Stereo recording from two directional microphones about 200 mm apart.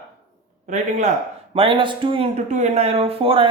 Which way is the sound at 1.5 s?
25° right (ahead or behind).